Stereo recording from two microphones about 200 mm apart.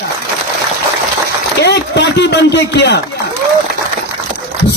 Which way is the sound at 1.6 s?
55° left (ahead or behind).